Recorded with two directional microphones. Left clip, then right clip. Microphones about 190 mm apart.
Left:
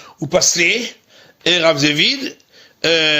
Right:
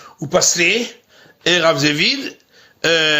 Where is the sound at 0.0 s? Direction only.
25° left (ahead or behind).